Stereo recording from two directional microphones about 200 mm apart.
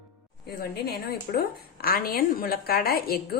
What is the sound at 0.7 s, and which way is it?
A woman's voice, 50° left (ahead or behind).